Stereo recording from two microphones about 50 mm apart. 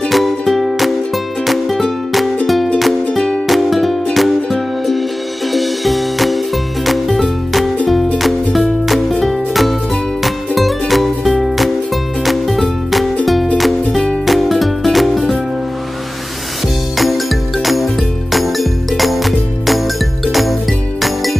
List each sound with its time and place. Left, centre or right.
0.1 s music: centre
3.1 s music: centre
3.4 s music: centre
16.9 s music: centre